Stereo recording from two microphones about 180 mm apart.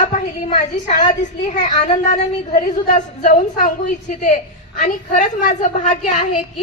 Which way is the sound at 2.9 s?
45° left (ahead or behind).